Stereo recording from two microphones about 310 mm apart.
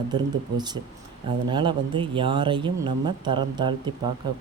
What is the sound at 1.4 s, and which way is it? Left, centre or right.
Speech, centre.